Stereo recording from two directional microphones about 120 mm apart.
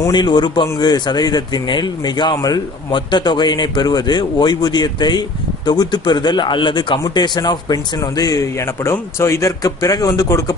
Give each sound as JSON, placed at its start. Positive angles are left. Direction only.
{"t": 0.1, "sound": "speech", "side_deg": 40}